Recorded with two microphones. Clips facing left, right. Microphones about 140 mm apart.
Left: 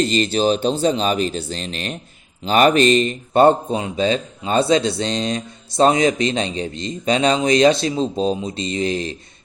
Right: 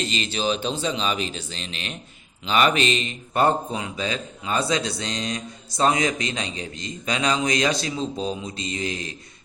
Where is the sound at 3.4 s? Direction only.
30° left (ahead or behind).